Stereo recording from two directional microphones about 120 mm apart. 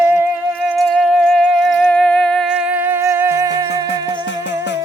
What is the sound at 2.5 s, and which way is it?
Music, 10° right (ahead or behind).